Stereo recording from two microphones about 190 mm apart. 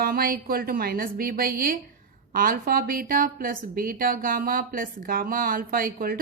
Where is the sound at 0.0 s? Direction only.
50° right (ahead or behind).